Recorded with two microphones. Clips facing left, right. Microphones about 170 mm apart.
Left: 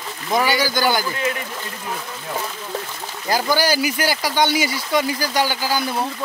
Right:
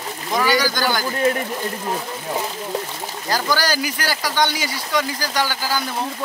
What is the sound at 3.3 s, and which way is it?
Speech, 15° left (ahead or behind).